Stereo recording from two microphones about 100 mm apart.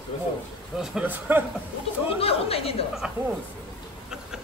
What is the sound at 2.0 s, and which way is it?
Speech, 75° left (ahead or behind).